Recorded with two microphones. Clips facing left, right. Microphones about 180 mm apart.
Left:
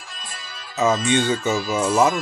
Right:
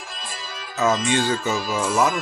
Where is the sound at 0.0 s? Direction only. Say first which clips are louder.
Right 4 dB; 90° right.